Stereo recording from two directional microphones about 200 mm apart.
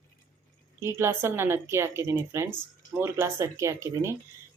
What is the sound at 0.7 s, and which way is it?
Speech, 10° right (ahead or behind).